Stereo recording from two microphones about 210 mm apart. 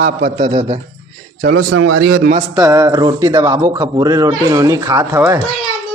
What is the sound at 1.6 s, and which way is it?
Speech, 90° right.